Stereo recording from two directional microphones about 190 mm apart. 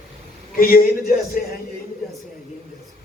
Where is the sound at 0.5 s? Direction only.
50° left (ahead or behind).